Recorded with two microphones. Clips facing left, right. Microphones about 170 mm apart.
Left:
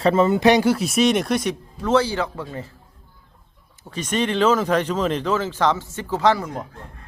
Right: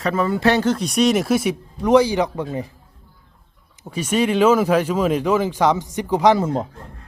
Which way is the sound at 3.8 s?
10° right (ahead or behind).